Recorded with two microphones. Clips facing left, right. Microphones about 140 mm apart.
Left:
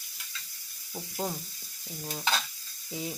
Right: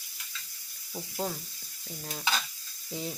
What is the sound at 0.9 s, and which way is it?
Speech, 5° left (ahead or behind).